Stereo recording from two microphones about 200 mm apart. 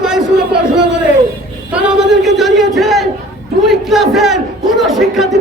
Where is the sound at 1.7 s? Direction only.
5° right (ahead or behind).